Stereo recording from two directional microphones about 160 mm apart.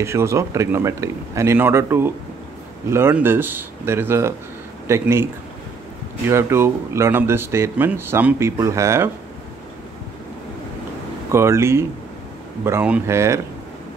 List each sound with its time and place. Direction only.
0.0 s speech: 15° right (ahead or behind)
11.3 s speech: 15° right (ahead or behind)